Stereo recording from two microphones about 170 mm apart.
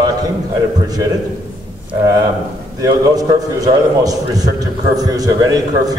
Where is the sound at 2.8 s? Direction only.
20° right (ahead or behind).